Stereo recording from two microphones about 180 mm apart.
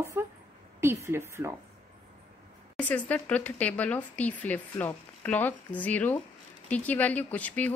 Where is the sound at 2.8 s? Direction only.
10° left (ahead or behind).